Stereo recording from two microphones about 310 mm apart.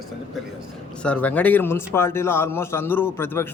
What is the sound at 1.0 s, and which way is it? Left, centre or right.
Speech, centre.